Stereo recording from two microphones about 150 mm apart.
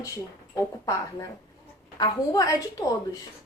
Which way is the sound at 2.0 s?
25° left (ahead or behind).